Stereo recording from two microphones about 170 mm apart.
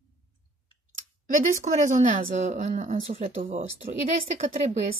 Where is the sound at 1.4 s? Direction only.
45° right (ahead or behind).